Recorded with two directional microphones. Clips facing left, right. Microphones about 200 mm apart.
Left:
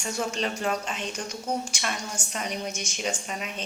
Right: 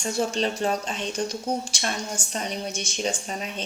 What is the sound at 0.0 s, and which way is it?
A woman's voice, 35° right (ahead or behind).